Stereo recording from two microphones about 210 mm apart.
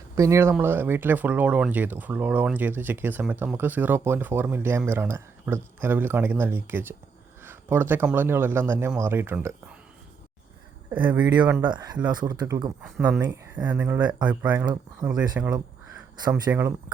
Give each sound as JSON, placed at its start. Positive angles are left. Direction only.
{"t": 0.2, "sound": "speech", "side_deg": -15}
{"t": 11.3, "sound": "speech", "side_deg": -15}
{"t": 14.2, "sound": "speech", "side_deg": -5}
{"t": 15.0, "sound": "speech", "side_deg": -20}
{"t": 15.4, "sound": "speech", "side_deg": -10}